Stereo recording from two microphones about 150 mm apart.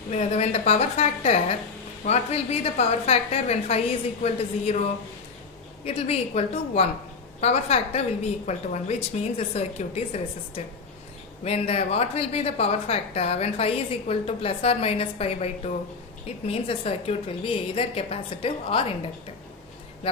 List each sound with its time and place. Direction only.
0.1 s a woman's voice: 50° left (ahead or behind)
5.8 s a woman's voice: 45° left (ahead or behind)